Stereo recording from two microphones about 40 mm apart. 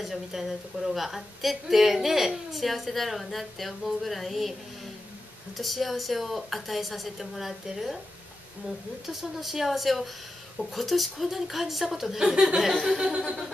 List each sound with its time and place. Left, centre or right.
0.0 s a woman's voice: centre
5.6 s a woman's voice: centre
9.0 s a woman's voice: centre